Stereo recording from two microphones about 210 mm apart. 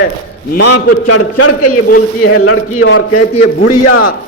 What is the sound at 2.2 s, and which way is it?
A man's voice, 75° left (ahead or behind).